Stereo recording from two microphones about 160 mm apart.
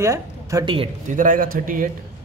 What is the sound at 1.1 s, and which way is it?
Speech, 55° right (ahead or behind).